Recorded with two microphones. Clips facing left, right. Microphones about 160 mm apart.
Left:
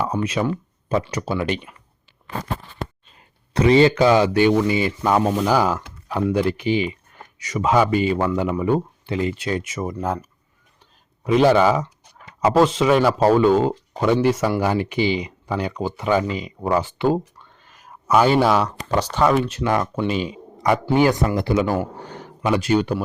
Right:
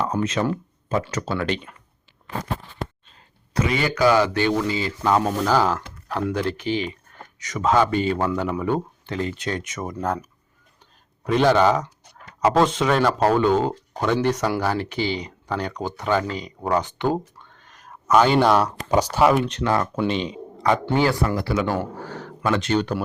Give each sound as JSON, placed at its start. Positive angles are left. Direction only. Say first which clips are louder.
{"t": 0.1, "sound": "speech", "louder": "even", "side_deg": -5}
{"t": 1.1, "sound": "speech", "louder": "left 1 dB", "side_deg": 10}
{"t": 3.5, "sound": "speech", "louder": "left 9 dB", "side_deg": 30}
{"t": 17.6, "sound": "a sound", "louder": "even", "side_deg": 5}
{"t": 18.9, "sound": "speech", "louder": "right 1 dB", "side_deg": -10}
{"t": 19.5, "sound": "speech", "louder": "left 1 dB", "side_deg": 10}